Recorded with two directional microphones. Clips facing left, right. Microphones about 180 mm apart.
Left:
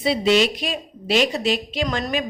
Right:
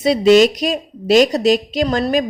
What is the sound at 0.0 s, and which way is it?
A woman's voice, 45° right (ahead or behind).